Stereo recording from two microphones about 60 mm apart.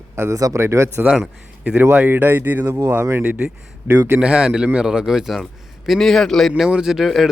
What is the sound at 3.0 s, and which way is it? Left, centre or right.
Speech, right.